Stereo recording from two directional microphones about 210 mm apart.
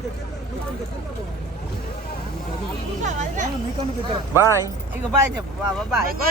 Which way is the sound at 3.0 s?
35° right (ahead or behind).